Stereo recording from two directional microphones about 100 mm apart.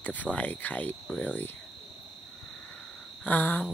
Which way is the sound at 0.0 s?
15° left (ahead or behind).